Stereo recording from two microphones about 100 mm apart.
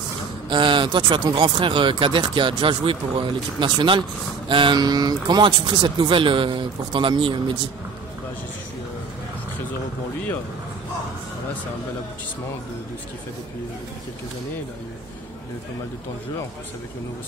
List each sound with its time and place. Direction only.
0.5 s speech: 55° right (ahead or behind)